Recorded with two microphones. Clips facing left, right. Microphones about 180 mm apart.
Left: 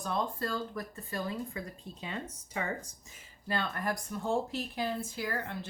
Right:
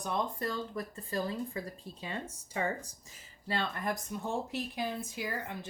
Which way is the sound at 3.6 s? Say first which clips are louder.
Even; 20° right (ahead or behind).